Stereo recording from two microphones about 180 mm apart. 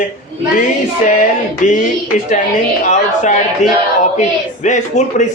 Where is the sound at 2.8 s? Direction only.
40° left (ahead or behind).